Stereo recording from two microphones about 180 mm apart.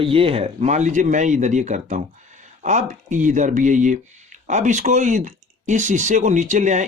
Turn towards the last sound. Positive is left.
turn(degrees=-40)  # may be behind; listen again after turning